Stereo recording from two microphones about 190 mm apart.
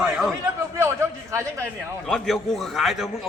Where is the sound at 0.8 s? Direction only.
15° right (ahead or behind).